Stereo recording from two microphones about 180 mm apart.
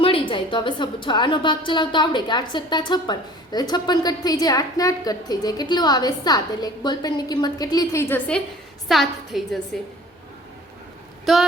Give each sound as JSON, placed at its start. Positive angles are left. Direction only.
{"t": 0.0, "sound": "a woman's voice", "side_deg": 30}
{"t": 8.9, "sound": "a woman's voice", "side_deg": 0}
{"t": 11.3, "sound": "a woman's voice", "side_deg": 0}